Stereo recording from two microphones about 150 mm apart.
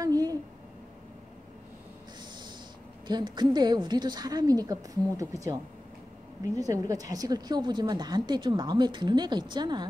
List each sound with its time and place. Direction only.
0.0 s a sound: 25° right (ahead or behind)
3.1 s a woman's voice: 30° right (ahead or behind)
6.6 s a woman's voice: 25° right (ahead or behind)